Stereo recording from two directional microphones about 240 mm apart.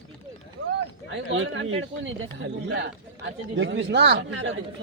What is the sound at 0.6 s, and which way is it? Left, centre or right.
Speech, right.